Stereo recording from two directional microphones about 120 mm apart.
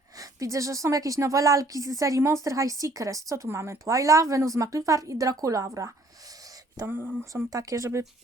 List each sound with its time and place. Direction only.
0.2 s a woman's voice: 25° right (ahead or behind)
6.8 s speech: 15° right (ahead or behind)
7.5 s a woman's voice: 30° right (ahead or behind)